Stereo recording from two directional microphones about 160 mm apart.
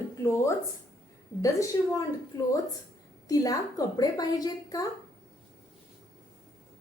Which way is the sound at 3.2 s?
25° left (ahead or behind).